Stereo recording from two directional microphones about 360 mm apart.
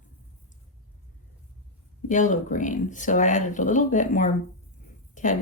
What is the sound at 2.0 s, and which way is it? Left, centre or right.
A woman's voice, left.